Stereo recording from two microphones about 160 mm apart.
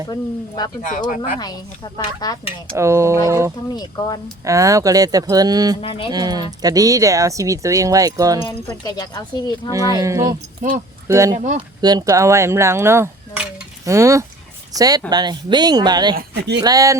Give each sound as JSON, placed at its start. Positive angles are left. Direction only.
{"t": 0.1, "sound": "speech", "side_deg": 25}
{"t": 0.9, "sound": "speech", "side_deg": 55}
{"t": 1.4, "sound": "speech", "side_deg": 25}
{"t": 2.7, "sound": "speech", "side_deg": -15}
{"t": 3.8, "sound": "speech", "side_deg": 25}
{"t": 4.4, "sound": "speech", "side_deg": -20}
{"t": 5.8, "sound": "speech", "side_deg": 35}
{"t": 6.1, "sound": "speech", "side_deg": -25}
{"t": 8.4, "sound": "speech", "side_deg": 25}
{"t": 9.9, "sound": "speech", "side_deg": -20}
{"t": 11.3, "sound": "speech", "side_deg": -55}
{"t": 11.8, "sound": "speech", "side_deg": -25}
{"t": 16.1, "sound": "speech", "side_deg": -90}
{"t": 16.6, "sound": "speech", "side_deg": -25}